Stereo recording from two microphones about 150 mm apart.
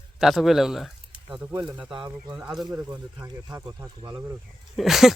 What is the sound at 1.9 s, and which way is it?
Speech, 30° right (ahead or behind).